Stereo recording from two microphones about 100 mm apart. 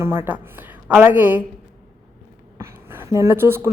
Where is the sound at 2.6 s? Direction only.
25° right (ahead or behind).